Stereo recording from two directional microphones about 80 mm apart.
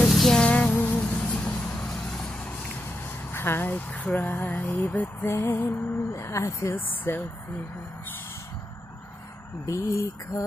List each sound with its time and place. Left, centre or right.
0.0 s music: centre
0.5 s music: centre
3.3 s speech: left
4.6 s speech: left
4.9 s speech: left
9.7 s speech: left